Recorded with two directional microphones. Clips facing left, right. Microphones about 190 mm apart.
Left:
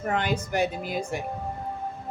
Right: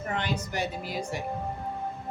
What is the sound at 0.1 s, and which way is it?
A woman's voice, 55° left (ahead or behind).